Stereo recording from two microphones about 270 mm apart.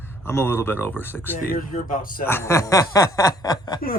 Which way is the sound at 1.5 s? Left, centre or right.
Left.